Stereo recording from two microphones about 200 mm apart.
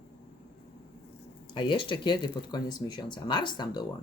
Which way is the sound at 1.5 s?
25° left (ahead or behind).